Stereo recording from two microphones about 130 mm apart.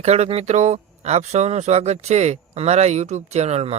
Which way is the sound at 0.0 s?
55° right (ahead or behind).